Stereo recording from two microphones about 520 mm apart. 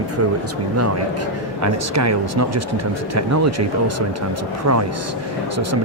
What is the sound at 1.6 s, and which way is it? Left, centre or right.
Speech, right.